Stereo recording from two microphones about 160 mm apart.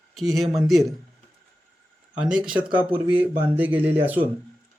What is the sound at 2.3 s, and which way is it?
Speech, 5° right (ahead or behind).